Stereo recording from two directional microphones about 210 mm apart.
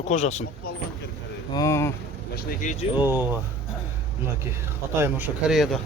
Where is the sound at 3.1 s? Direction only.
10° right (ahead or behind).